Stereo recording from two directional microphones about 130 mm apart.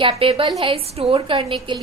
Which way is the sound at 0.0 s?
45° right (ahead or behind).